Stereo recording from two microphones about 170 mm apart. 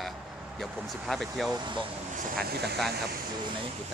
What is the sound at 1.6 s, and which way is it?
Speech, 30° right (ahead or behind).